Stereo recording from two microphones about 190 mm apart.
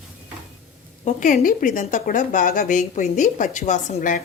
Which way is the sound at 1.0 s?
40° left (ahead or behind).